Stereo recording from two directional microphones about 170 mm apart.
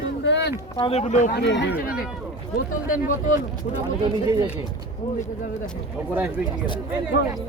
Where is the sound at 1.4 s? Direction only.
90° left.